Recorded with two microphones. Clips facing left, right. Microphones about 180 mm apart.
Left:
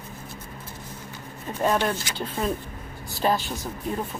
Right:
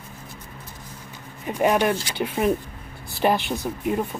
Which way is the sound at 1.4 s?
15° right (ahead or behind).